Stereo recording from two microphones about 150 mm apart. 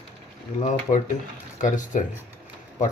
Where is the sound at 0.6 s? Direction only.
55° left (ahead or behind).